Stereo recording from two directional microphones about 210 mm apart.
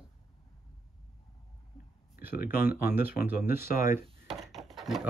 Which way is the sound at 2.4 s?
10° right (ahead or behind).